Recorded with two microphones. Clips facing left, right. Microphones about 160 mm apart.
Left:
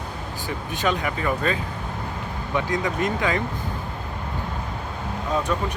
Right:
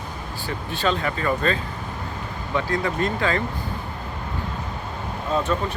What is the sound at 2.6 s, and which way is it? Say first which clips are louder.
Speech: right 1 dB; 15° left (ahead or behind).